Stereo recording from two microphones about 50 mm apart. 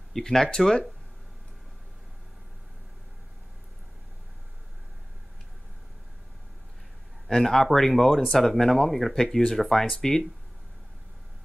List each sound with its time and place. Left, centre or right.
0.1 s speech: centre
7.2 s speech: centre